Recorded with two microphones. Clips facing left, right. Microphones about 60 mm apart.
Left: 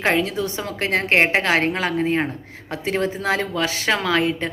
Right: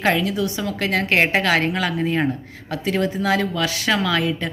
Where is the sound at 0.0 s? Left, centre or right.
Left.